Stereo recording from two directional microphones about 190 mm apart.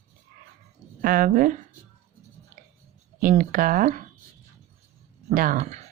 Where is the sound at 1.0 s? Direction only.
45° right (ahead or behind).